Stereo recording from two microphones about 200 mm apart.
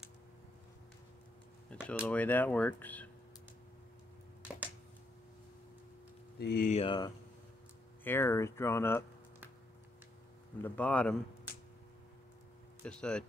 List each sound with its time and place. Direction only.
1.7 s speech: 5° left (ahead or behind)
6.3 s speech: 50° left (ahead or behind)
6.7 s speech: 25° left (ahead or behind)
8.0 s speech: 10° left (ahead or behind)
10.6 s speech: 5° left (ahead or behind)
12.8 s speech: 5° left (ahead or behind)